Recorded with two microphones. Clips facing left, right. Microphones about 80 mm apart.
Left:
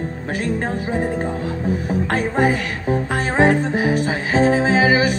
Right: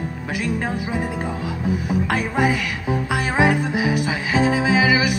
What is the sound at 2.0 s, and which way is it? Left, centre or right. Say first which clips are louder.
Music: left 3 dB; left.